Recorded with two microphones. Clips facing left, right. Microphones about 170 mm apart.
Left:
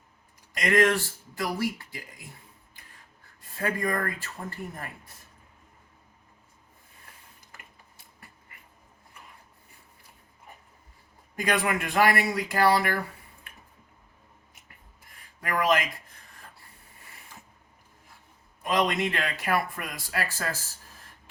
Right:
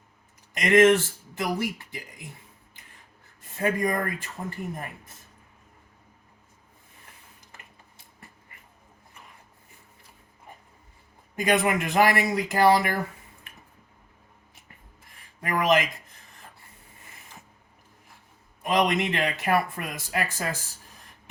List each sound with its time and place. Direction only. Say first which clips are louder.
0.5 s speech: right 5 dB; 20° right (ahead or behind)
3.5 s speech: right 3 dB; 20° right (ahead or behind)
11.3 s speech: right 4 dB; 20° right (ahead or behind)
15.4 s speech: right 2 dB; 20° right (ahead or behind)
18.6 s speech: right 2 dB; 20° right (ahead or behind)